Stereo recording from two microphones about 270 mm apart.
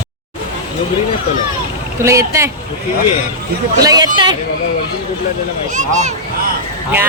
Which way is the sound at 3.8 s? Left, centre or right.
Centre.